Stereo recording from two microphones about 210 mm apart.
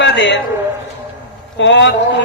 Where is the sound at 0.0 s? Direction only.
55° left (ahead or behind).